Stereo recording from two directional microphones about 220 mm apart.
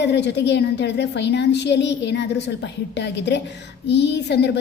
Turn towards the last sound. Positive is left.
turn(degrees=50)  # may be behind; listen again after turning